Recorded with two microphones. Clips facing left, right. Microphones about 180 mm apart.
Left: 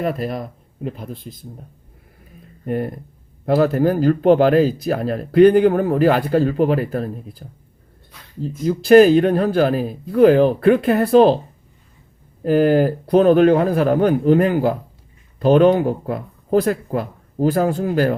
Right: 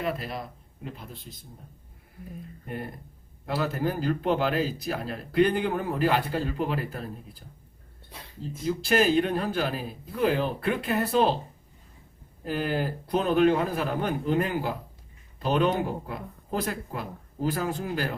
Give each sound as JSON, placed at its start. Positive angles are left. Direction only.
{"t": 0.0, "sound": "speech", "side_deg": 50}
{"t": 3.4, "sound": "a man's voice", "side_deg": 55}
{"t": 8.9, "sound": "speech", "side_deg": 50}
{"t": 12.5, "sound": "a man's voice", "side_deg": 55}
{"t": 17.4, "sound": "speech", "side_deg": 50}